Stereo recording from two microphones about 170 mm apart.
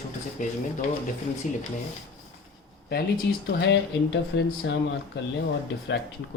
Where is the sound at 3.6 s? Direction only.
90° left.